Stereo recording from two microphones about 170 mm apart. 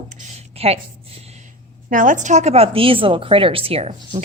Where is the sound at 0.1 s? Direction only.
35° right (ahead or behind).